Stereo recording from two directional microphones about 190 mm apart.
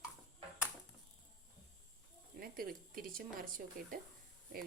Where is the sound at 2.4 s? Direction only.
50° right (ahead or behind).